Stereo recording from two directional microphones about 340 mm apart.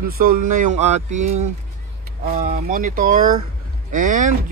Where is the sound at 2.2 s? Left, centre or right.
Right.